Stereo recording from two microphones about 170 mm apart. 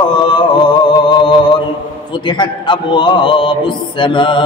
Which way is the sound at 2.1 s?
25° left (ahead or behind).